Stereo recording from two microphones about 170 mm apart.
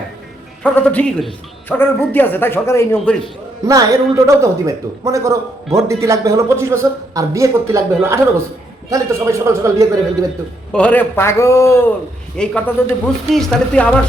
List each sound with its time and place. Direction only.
0.6 s speech: 10° left (ahead or behind)
3.7 s a man's voice: 20° right (ahead or behind)
10.7 s speech: 10° left (ahead or behind)